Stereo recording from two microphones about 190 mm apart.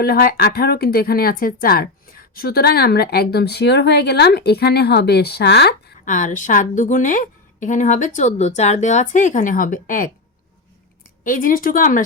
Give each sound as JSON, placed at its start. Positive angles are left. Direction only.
{"t": 0.0, "sound": "speech", "side_deg": 55}
{"t": 6.1, "sound": "a woman's voice", "side_deg": 40}
{"t": 11.2, "sound": "speech", "side_deg": 45}